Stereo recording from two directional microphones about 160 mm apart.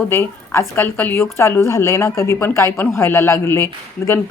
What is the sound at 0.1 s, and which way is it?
A woman's voice, 15° left (ahead or behind).